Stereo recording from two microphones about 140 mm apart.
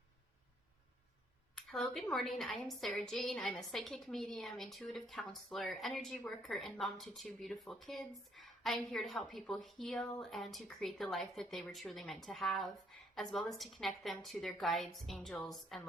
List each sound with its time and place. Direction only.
1.5 s a woman's voice: centre (ahead or behind)